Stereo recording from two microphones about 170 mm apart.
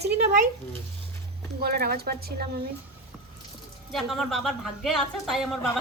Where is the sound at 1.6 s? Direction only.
65° right (ahead or behind).